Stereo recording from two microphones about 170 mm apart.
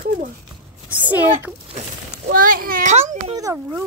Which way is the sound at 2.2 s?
55° right (ahead or behind).